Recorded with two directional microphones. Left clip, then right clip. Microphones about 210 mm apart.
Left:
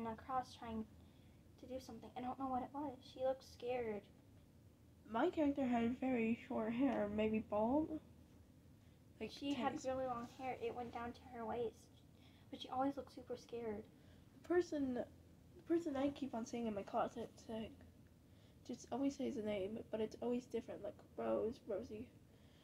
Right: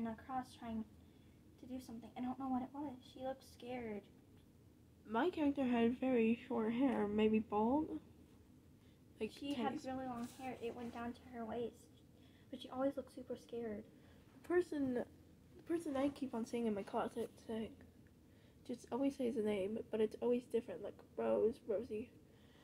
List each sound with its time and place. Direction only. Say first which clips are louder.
0.0 s a woman's voice: left 1 dB; 20° left (ahead or behind)
5.1 s a woman's voice: right 1 dB; 30° right (ahead or behind)
9.3 s a woman's voice: left 2 dB; 20° left (ahead or behind)
14.4 s speech: right 1 dB; 30° right (ahead or behind)
18.7 s speech: right 2 dB; 30° right (ahead or behind)